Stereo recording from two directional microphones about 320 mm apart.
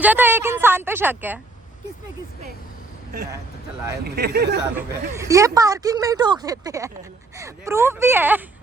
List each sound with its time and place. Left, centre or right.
0.0 s speech: centre
4.0 s speech: right
5.1 s speech: centre